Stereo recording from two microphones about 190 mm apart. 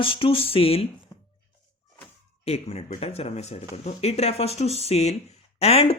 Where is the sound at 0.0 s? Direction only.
30° left (ahead or behind).